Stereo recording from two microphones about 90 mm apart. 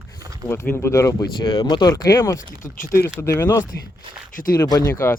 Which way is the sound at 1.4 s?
65° left (ahead or behind).